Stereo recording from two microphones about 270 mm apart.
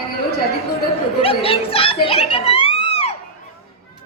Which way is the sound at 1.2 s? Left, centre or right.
Centre.